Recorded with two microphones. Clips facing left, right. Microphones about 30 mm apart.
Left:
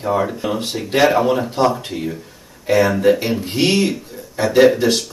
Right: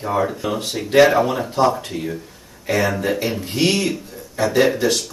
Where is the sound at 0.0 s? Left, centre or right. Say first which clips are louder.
Left 2 dB; centre.